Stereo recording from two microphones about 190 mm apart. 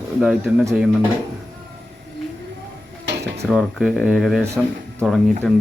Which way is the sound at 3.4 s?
Centre (ahead or behind).